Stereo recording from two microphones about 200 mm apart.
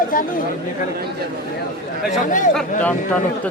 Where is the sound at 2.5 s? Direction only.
Centre (ahead or behind).